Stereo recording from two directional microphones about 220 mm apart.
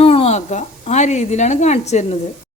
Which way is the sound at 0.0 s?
25° left (ahead or behind).